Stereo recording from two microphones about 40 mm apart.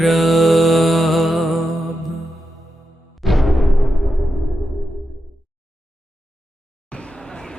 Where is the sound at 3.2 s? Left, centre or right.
Centre.